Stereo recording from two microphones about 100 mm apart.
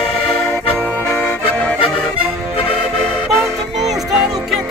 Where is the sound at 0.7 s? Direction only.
10° left (ahead or behind).